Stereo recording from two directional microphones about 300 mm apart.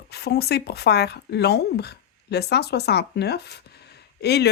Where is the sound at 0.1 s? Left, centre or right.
Left.